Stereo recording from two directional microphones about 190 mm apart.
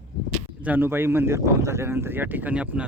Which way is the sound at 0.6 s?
10° right (ahead or behind).